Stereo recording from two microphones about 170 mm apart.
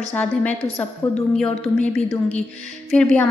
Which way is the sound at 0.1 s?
10° left (ahead or behind).